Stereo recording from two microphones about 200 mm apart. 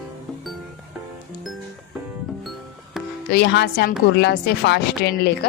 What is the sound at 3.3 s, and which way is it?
Speech, 55° left (ahead or behind).